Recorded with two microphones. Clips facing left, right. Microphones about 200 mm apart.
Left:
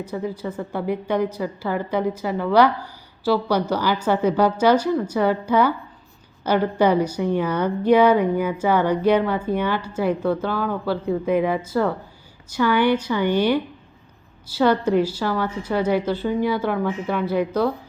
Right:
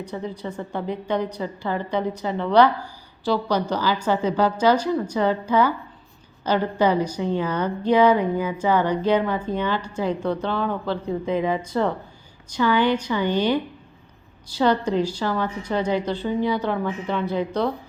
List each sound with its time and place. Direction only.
0.0 s a woman's voice: 5° left (ahead or behind)
16.2 s speech: 20° right (ahead or behind)
16.6 s a woman's voice: 10° left (ahead or behind)